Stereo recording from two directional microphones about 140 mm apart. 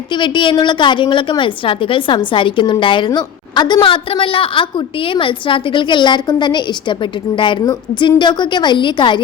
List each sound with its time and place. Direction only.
0.1 s a woman's voice: 35° left (ahead or behind)